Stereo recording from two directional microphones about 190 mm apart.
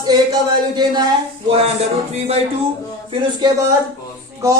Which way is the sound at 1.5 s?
30° right (ahead or behind).